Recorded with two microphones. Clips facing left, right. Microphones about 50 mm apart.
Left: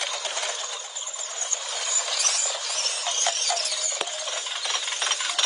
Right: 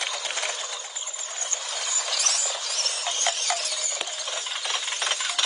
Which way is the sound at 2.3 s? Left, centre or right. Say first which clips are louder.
Even; left.